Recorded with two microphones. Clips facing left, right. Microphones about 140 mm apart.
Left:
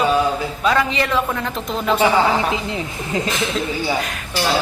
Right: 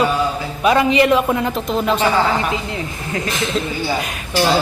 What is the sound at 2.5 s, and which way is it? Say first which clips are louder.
Speech: even; 20° left (ahead or behind).